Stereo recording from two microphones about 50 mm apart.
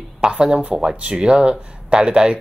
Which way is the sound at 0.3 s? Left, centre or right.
Centre.